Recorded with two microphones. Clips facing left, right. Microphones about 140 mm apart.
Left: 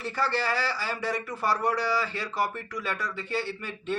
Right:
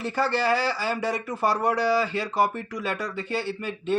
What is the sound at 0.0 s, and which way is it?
Speech, 20° right (ahead or behind).